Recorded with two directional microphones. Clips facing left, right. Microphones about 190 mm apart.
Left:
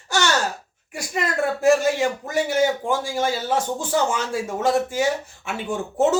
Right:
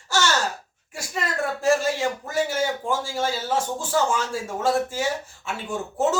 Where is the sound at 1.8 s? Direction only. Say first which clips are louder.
Left 3 dB; 15° left (ahead or behind).